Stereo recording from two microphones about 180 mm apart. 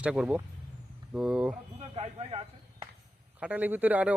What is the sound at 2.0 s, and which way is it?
Speech, 35° right (ahead or behind).